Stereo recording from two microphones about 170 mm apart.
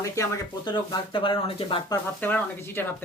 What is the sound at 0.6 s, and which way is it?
Speech, 30° left (ahead or behind).